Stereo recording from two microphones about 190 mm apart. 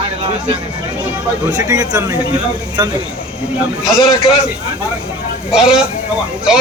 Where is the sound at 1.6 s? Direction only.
20° right (ahead or behind).